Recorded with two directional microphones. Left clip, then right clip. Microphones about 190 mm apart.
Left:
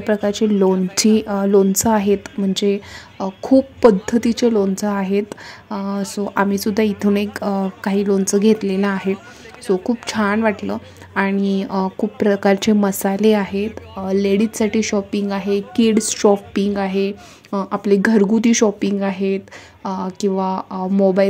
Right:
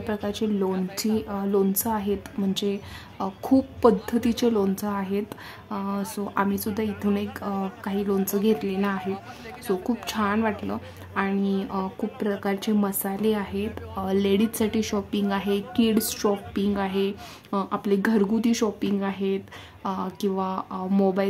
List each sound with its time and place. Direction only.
0.0 s speech: 30° left (ahead or behind)
14.0 s speech: 15° left (ahead or behind)